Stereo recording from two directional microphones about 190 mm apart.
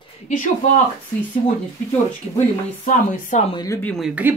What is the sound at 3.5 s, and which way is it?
Speech, 20° left (ahead or behind).